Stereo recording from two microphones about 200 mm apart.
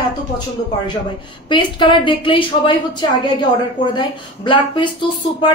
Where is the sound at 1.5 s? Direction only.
25° left (ahead or behind).